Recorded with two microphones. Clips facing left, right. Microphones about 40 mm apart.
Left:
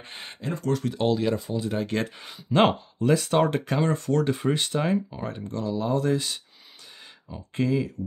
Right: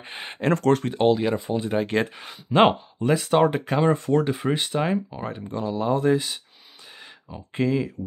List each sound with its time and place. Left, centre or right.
0.0 s speech: centre
0.4 s speech: right
0.8 s speech: right
1.5 s speech: right